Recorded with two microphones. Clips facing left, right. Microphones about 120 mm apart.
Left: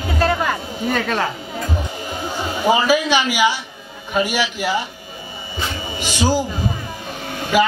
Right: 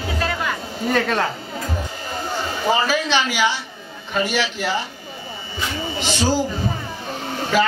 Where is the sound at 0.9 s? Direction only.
Centre (ahead or behind).